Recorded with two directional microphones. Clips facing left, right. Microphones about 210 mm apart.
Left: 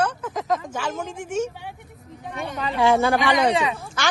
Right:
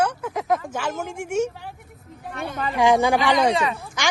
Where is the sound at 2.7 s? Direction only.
15° right (ahead or behind).